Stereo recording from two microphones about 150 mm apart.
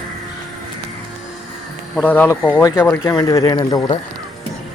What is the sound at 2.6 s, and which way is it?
Speech, 25° left (ahead or behind).